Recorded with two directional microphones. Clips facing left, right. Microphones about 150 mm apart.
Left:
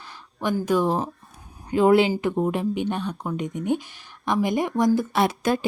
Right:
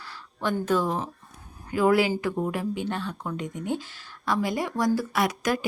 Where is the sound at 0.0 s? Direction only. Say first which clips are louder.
Left 2 dB; 15° left (ahead or behind).